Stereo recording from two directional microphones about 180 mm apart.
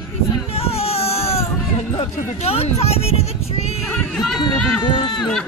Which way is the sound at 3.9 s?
Centre (ahead or behind).